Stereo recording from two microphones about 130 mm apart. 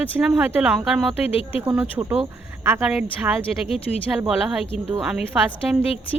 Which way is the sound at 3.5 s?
5° right (ahead or behind).